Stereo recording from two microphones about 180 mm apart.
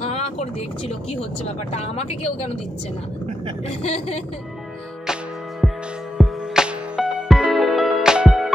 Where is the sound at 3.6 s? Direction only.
35° left (ahead or behind).